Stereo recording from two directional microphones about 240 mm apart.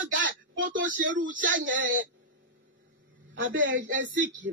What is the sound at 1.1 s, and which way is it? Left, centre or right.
Speech, right.